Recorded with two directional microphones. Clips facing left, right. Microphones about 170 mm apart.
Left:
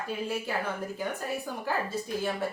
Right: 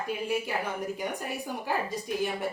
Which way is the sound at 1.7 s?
15° right (ahead or behind).